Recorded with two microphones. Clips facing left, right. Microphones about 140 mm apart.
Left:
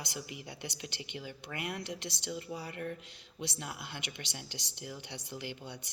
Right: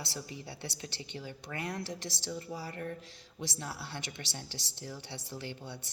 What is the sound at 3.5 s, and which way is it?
A woman's voice, 15° left (ahead or behind).